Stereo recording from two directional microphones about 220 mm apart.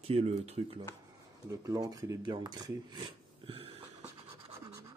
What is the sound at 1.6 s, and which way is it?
Speech, 15° right (ahead or behind).